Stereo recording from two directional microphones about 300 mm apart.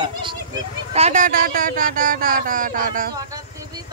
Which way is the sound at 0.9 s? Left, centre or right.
Right.